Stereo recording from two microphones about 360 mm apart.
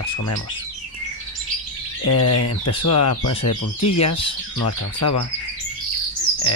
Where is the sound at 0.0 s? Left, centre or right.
Left.